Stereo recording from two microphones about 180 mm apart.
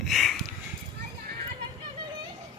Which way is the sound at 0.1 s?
Centre (ahead or behind).